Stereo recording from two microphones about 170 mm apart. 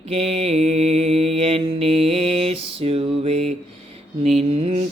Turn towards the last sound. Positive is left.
turn(degrees=-35)  # may be behind; listen again after turning